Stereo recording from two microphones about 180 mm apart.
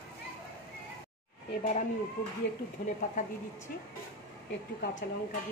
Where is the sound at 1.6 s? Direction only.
40° left (ahead or behind).